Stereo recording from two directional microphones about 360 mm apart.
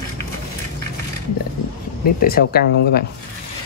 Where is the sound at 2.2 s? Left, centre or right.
Left.